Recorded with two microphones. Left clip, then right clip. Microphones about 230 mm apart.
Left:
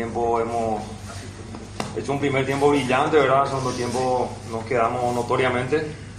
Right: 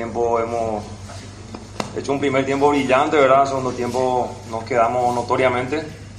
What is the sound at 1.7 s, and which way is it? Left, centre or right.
A woman's voice, right.